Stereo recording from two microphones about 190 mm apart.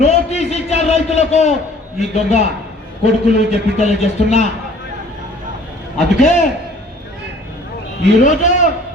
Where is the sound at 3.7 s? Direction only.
35° left (ahead or behind).